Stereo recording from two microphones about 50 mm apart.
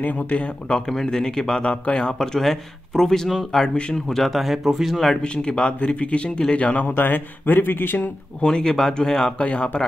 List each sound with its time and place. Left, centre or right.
0.0 s speech: left
0.8 s speech: centre
2.1 s speech: centre
3.5 s speech: centre
4.1 s speech: centre
5.1 s speech: centre
7.0 s speech: left
8.4 s speech: centre
9.4 s speech: left